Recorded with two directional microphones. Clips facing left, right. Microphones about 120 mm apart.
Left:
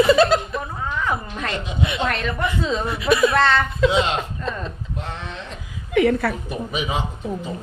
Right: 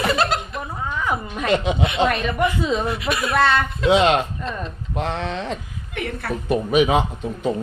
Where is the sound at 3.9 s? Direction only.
70° right (ahead or behind).